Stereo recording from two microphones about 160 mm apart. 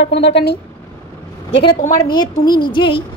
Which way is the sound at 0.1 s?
90° left.